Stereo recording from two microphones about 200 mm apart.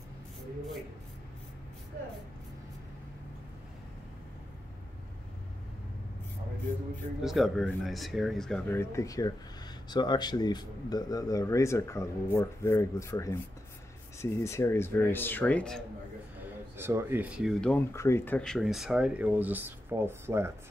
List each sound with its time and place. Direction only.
7.2 s speech: centre (ahead or behind)
16.7 s speech: 10° right (ahead or behind)